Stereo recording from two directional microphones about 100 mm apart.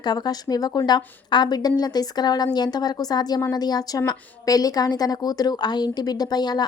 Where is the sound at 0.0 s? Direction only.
45° left (ahead or behind).